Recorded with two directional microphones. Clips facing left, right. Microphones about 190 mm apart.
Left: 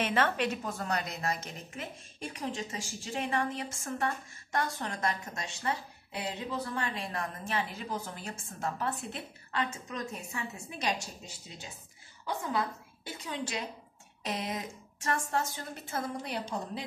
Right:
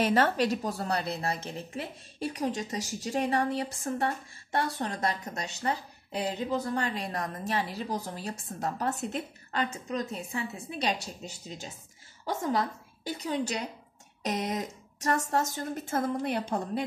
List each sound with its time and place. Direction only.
0.0 s a woman's voice: 40° right (ahead or behind); by 16.8 s 55° right (ahead or behind)